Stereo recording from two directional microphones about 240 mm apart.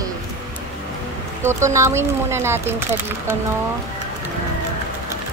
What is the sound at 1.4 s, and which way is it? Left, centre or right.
Speech, centre.